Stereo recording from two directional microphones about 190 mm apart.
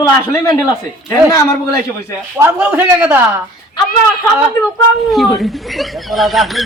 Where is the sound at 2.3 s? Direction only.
10° right (ahead or behind).